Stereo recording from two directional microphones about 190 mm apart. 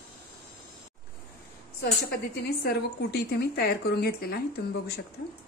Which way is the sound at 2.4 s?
60° left (ahead or behind).